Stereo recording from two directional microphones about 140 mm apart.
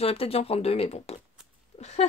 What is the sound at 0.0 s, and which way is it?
Speech, 45° left (ahead or behind).